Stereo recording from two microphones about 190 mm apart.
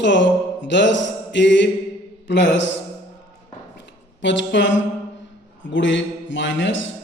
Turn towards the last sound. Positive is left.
turn(degrees=75)  # may be behind; listen again after turning